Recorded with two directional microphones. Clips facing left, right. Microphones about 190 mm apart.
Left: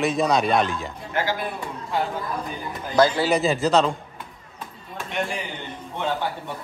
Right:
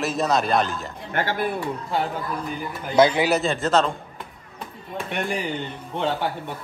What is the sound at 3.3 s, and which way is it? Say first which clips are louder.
Speech: left 1 dB; centre (ahead or behind).